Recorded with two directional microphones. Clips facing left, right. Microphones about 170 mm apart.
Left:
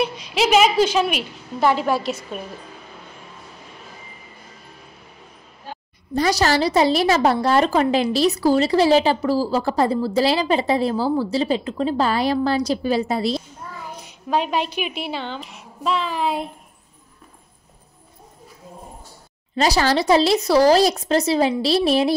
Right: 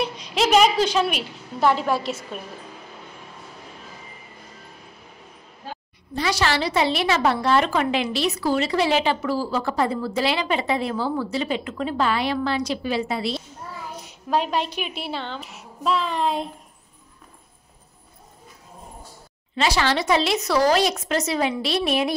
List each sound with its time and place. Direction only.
0.0 s a woman's voice: 5° left (ahead or behind)
6.1 s a woman's voice: 40° left (ahead or behind)
14.3 s a woman's voice: centre (ahead or behind)
19.5 s a woman's voice: 40° left (ahead or behind)